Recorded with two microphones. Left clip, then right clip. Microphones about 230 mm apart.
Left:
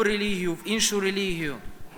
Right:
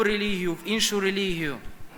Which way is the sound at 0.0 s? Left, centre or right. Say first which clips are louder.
Even; centre.